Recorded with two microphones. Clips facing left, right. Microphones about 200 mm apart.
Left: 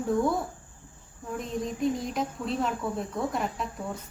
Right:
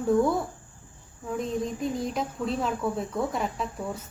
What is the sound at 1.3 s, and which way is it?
Speech, centre (ahead or behind).